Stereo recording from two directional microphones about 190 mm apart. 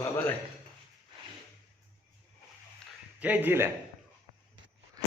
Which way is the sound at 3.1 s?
10° right (ahead or behind).